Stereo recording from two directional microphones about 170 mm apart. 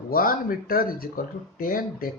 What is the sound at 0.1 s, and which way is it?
Speech, 55° left (ahead or behind).